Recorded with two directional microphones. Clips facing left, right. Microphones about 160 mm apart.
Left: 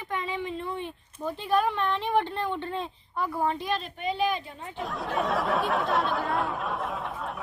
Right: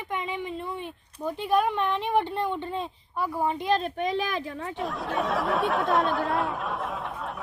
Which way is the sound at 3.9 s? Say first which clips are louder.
Even; 90° right.